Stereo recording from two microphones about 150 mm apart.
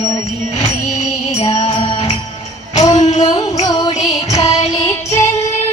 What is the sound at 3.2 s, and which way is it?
Music, 30° left (ahead or behind).